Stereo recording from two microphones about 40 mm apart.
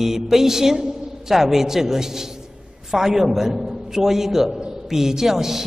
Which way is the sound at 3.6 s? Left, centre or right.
Centre.